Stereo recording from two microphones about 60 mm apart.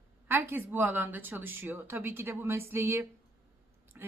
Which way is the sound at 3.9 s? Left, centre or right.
Right.